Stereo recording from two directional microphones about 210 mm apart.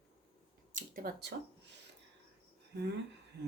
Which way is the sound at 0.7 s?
40° right (ahead or behind).